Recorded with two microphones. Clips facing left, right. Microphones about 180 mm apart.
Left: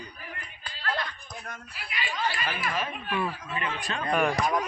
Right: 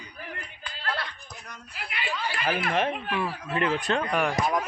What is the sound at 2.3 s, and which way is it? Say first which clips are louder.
Speech: right 5 dB; 65° right (ahead or behind).